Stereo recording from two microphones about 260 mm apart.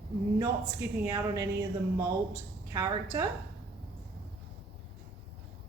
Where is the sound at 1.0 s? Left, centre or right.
Centre.